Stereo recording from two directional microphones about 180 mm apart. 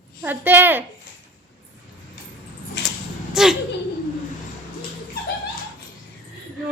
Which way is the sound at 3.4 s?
Centre (ahead or behind).